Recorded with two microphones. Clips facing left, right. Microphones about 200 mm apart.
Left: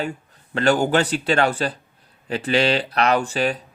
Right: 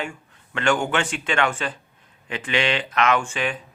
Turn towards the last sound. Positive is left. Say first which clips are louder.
# left 4 dB
turn(degrees=40)  # may be behind; listen again after turning